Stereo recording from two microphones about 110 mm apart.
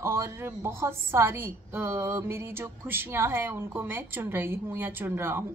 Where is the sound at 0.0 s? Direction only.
25° right (ahead or behind).